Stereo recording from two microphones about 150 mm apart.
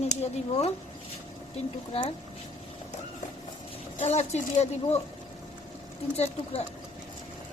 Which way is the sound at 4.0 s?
50° left (ahead or behind).